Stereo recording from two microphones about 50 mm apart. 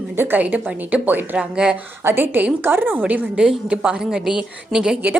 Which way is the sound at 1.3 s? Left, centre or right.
Centre.